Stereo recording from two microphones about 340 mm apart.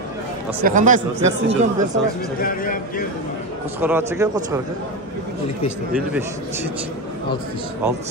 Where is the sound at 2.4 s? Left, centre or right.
Left.